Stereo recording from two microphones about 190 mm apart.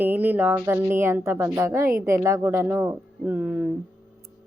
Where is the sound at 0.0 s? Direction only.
10° right (ahead or behind).